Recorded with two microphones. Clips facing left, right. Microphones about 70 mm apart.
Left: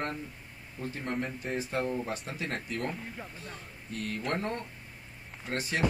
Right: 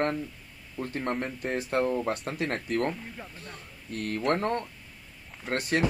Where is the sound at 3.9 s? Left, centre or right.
Right.